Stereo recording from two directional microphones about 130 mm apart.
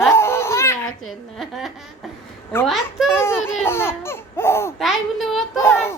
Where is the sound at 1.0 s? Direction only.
Centre (ahead or behind).